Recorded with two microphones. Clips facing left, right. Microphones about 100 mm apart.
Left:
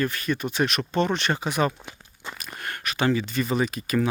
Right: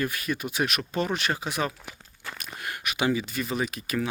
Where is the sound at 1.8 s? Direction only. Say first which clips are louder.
Left 1 dB; 20° left (ahead or behind).